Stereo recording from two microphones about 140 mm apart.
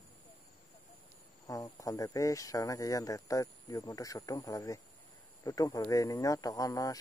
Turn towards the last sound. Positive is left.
turn(degrees=25)  # may be behind; listen again after turning